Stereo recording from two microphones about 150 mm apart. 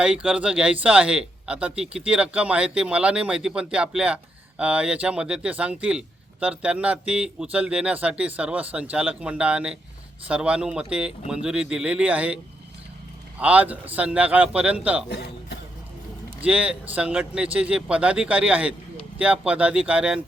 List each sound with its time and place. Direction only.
0.0 s speech: 5° right (ahead or behind)
13.4 s speech: 10° right (ahead or behind)
15.1 s a man's voice: 90° left
16.4 s speech: 10° right (ahead or behind)